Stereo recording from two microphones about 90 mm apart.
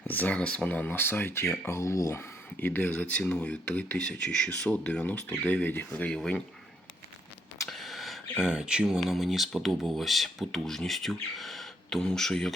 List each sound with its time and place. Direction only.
0.1 s speech: 15° left (ahead or behind)
7.7 s speech: centre (ahead or behind)